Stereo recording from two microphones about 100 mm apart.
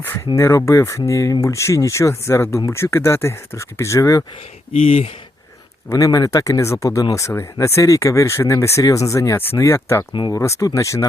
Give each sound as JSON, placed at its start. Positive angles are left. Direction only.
{"t": 0.3, "sound": "speech", "side_deg": 30}
{"t": 4.7, "sound": "speech", "side_deg": 90}
{"t": 5.9, "sound": "speech", "side_deg": 35}